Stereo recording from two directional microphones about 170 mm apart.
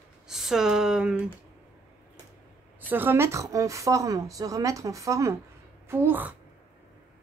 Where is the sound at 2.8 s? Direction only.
10° right (ahead or behind).